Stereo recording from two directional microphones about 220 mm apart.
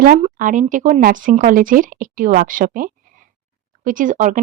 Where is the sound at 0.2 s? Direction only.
35° right (ahead or behind).